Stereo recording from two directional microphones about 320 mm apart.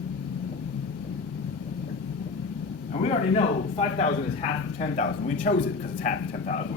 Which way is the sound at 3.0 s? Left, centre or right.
Centre.